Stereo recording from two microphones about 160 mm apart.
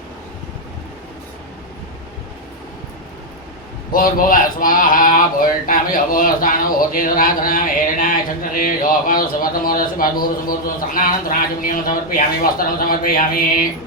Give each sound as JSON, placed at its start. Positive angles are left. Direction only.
{"t": 3.9, "sound": "speech", "side_deg": 60}